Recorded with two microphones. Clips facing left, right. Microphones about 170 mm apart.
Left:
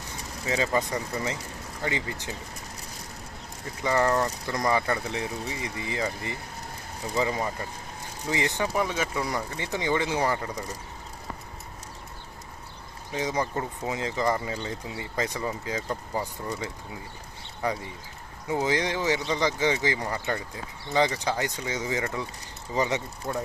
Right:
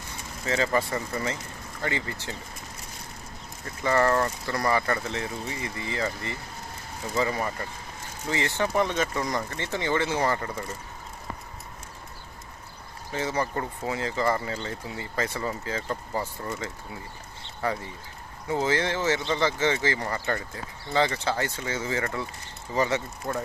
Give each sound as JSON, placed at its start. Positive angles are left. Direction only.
{"t": 0.4, "sound": "speech", "side_deg": 15}
{"t": 3.8, "sound": "speech", "side_deg": 15}
{"t": 13.1, "sound": "speech", "side_deg": 15}
{"t": 23.3, "sound": "speech", "side_deg": 5}